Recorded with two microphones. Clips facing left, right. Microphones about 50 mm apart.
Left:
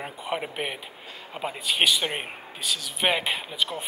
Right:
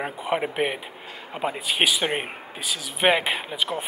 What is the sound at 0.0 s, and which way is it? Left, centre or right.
Speech, centre.